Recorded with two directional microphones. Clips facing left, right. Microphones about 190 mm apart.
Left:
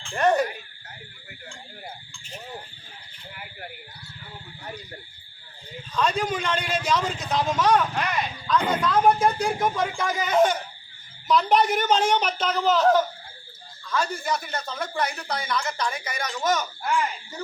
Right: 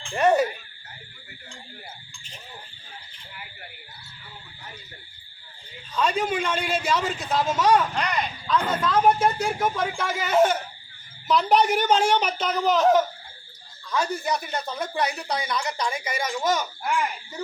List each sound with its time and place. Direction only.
0.2 s frog: 10° right (ahead or behind)
6.0 s a man's voice: 5° right (ahead or behind)
7.9 s a man's voice: 5° left (ahead or behind); by 16.9 s 10° right (ahead or behind)